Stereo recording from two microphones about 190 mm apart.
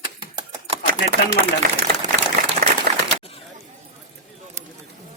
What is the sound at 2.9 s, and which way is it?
Bird, 50° right (ahead or behind).